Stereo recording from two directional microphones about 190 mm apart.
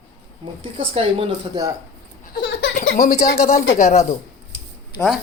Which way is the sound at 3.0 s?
20° left (ahead or behind).